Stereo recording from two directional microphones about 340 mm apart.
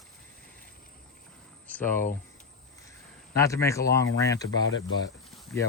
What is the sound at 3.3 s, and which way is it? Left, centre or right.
Speech, centre.